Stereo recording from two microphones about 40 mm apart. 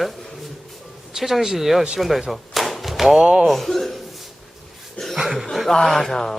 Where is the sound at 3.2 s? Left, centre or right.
Centre.